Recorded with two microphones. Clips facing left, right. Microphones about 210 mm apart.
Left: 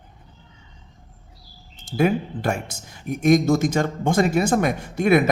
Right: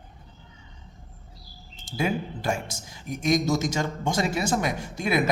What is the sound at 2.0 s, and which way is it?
Speech, 60° left (ahead or behind).